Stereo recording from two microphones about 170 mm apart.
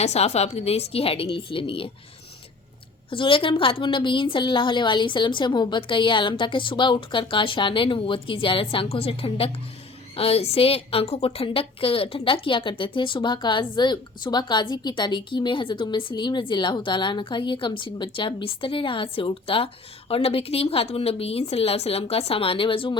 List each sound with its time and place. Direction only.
0.0 s a woman's voice: 40° left (ahead or behind)
3.1 s a woman's voice: 30° left (ahead or behind)